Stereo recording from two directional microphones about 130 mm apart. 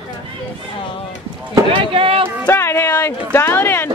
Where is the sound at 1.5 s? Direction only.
40° right (ahead or behind).